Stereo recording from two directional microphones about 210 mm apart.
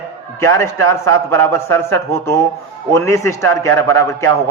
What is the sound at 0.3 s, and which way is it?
A man's voice, 10° left (ahead or behind).